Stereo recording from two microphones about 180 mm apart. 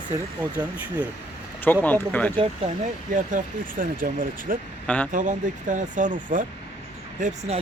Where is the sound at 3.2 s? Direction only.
45° right (ahead or behind).